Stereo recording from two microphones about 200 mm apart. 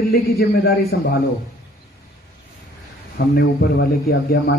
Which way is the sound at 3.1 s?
50° left (ahead or behind).